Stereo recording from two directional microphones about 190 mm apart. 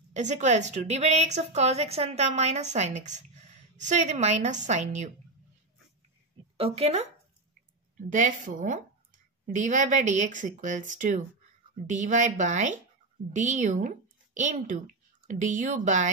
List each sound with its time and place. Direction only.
0.1 s a woman's voice: 40° right (ahead or behind)
6.5 s a woman's voice: 30° right (ahead or behind)
8.1 s a woman's voice: 40° right (ahead or behind)